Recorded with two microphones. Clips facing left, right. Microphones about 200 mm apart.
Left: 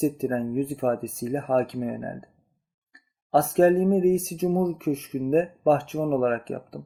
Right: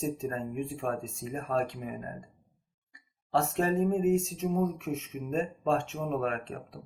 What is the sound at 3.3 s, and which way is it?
Speech, 35° left (ahead or behind).